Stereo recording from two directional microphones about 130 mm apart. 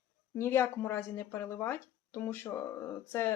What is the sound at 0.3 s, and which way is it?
Speech, 20° left (ahead or behind).